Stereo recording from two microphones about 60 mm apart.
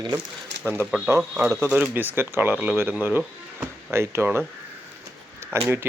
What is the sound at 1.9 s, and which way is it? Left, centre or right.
Speech, right.